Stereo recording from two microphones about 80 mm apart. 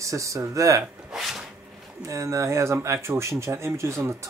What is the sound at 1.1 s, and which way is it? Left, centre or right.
Dishes, centre.